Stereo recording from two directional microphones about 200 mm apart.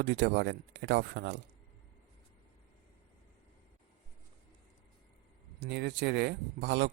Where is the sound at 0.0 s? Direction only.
55° right (ahead or behind).